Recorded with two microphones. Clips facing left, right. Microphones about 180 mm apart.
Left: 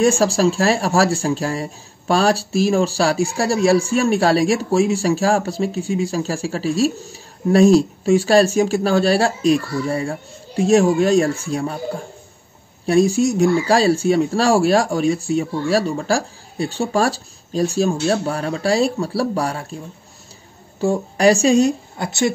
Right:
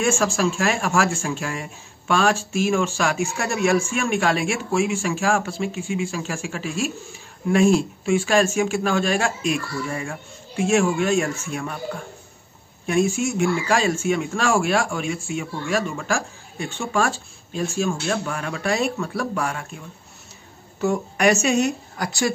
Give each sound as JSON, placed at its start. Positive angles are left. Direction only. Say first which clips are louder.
{"t": 0.0, "sound": "speech", "louder": "left 6 dB", "side_deg": 35}
{"t": 20.8, "sound": "speech", "louder": "left 4 dB", "side_deg": 30}